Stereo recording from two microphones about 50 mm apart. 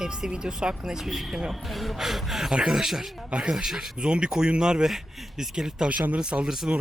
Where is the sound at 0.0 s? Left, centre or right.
Centre.